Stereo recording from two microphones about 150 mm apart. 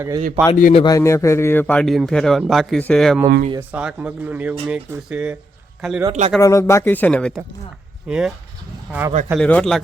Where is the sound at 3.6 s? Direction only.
10° right (ahead or behind).